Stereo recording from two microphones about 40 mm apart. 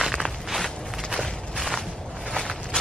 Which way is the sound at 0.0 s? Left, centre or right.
Centre.